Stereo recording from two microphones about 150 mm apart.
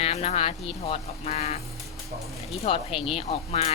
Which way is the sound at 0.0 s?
45° left (ahead or behind).